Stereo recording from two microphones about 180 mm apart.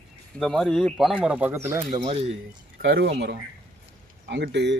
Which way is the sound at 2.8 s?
70° right (ahead or behind).